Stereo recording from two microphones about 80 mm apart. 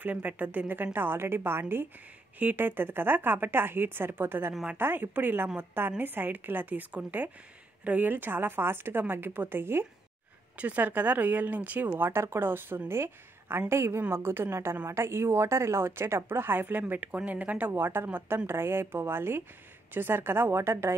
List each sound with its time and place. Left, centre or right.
0.0 s a woman's voice: centre